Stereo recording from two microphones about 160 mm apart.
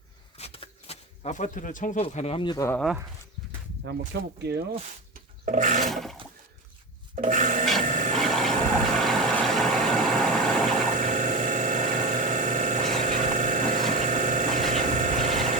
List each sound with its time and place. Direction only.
0.3 s shuffling cards: 40° left (ahead or behind); by 2.0 s 55° left (ahead or behind)
2.0 s speech: 40° left (ahead or behind)
3.8 s speech: 90° right
5.5 s toilet flush: 50° right (ahead or behind)
5.8 s toilet flush: centre (ahead or behind)
7.2 s rub: 55° right (ahead or behind)
7.8 s a sound: 55° right (ahead or behind)
8.2 s vehicle: centre (ahead or behind)
10.9 s a sound: 50° right (ahead or behind)